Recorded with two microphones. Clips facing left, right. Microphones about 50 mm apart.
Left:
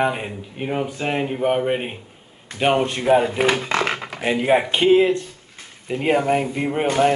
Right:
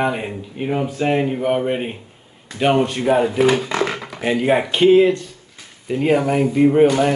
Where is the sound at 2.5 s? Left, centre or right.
Left.